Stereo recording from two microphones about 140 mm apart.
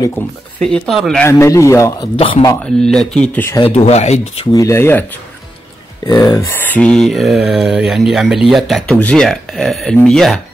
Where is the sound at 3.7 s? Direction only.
50° left (ahead or behind).